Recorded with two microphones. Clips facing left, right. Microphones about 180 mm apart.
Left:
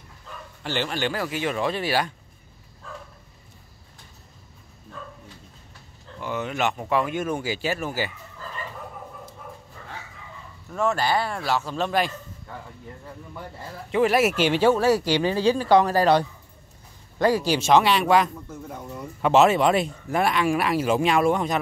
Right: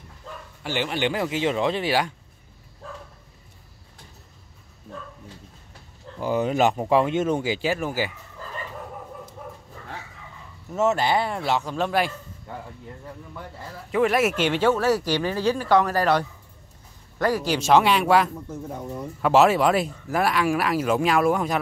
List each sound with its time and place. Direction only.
0.7 s speech: 15° right (ahead or behind)
6.1 s speech: 35° right (ahead or behind); by 8.1 s 15° right (ahead or behind)
10.7 s speech: 20° right (ahead or behind)
13.9 s speech: 5° left (ahead or behind)
15.0 s speech: 20° left (ahead or behind)
17.6 s speech: 5° right (ahead or behind)
18.3 s speech: 20° right (ahead or behind)
19.2 s speech: 5° right (ahead or behind)